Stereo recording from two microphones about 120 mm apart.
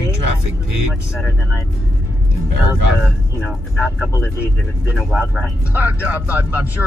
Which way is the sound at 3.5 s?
Centre (ahead or behind).